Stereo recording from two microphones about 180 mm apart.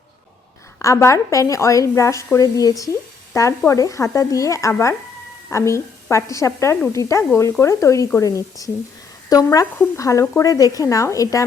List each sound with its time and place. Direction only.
0.8 s a woman's voice: 15° left (ahead or behind)